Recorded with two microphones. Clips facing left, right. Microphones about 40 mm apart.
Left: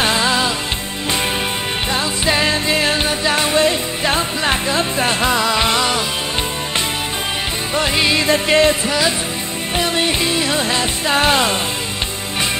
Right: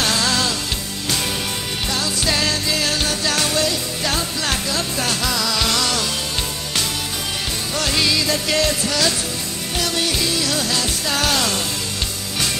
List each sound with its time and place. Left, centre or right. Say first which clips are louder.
0.0 s music: left 4 dB; left
1.9 s music: left 3 dB; left
7.7 s music: left 4 dB; left